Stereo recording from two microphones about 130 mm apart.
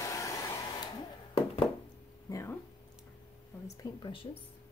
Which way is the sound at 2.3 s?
20° left (ahead or behind).